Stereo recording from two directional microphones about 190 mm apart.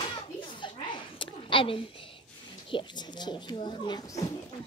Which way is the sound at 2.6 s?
25° left (ahead or behind).